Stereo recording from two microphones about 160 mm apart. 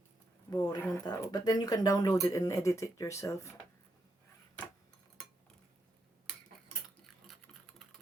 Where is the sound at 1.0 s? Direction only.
25° left (ahead or behind).